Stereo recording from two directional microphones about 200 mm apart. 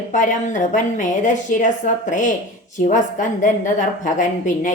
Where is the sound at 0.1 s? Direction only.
40° left (ahead or behind).